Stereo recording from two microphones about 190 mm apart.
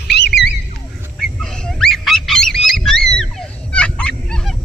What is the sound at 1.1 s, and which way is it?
Goose, 5° left (ahead or behind).